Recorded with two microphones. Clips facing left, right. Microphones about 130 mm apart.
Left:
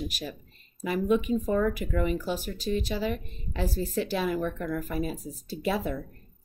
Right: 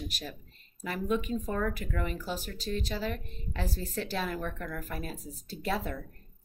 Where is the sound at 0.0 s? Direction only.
5° left (ahead or behind).